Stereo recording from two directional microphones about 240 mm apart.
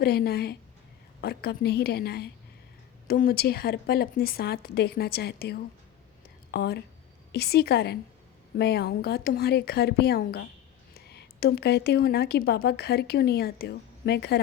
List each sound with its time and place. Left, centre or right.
0.0 s a woman's voice: left